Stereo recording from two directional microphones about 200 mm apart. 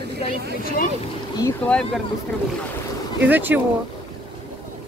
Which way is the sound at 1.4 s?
5° left (ahead or behind).